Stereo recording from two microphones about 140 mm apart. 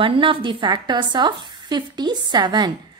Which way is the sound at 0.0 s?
40° right (ahead or behind).